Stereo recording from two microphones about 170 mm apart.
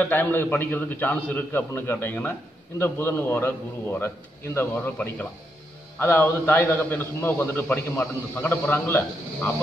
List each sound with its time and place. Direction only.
0.0 s a man's voice: 10° left (ahead or behind)